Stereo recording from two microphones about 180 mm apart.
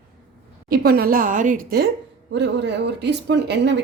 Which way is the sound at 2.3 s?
75° right (ahead or behind).